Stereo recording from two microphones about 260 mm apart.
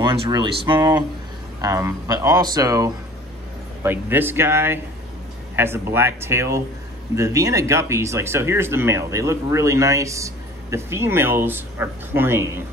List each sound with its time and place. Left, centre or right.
0.0 s speech: centre